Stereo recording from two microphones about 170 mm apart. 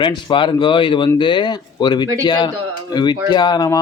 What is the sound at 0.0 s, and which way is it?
Speech, 30° left (ahead or behind).